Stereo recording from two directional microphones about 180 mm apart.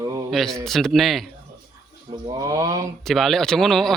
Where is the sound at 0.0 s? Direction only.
15° right (ahead or behind).